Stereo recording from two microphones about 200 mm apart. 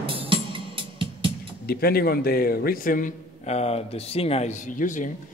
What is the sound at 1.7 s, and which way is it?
A man's voice, 50° left (ahead or behind).